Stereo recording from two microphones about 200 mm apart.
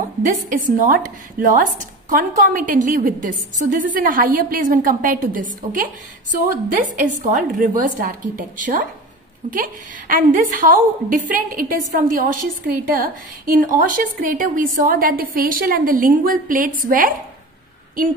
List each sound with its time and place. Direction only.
0.4 s a woman's voice: 40° right (ahead or behind)